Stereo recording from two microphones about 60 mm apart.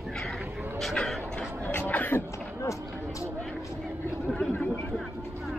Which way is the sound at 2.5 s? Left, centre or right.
Left.